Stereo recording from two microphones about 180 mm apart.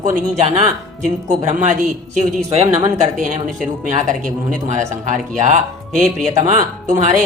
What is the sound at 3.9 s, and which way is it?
Speech, 45° right (ahead or behind).